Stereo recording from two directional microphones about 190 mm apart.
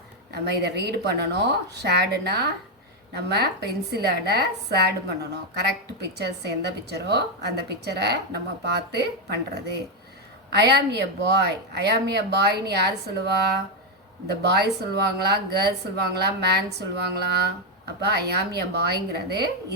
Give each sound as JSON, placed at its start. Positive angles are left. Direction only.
{"t": 0.3, "sound": "a woman's voice", "side_deg": -60}
{"t": 10.5, "sound": "a woman's voice", "side_deg": -60}
{"t": 14.3, "sound": "a woman's voice", "side_deg": -60}